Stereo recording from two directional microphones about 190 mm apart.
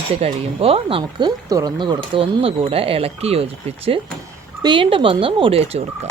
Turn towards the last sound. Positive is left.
turn(degrees=-35)  # may be behind; listen again after turning